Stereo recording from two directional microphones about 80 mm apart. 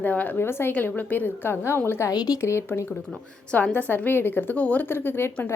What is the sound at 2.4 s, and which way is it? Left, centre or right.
Speech, left.